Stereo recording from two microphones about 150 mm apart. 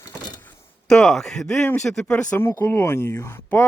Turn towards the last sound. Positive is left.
turn(degrees=15)  # may be behind; listen again after turning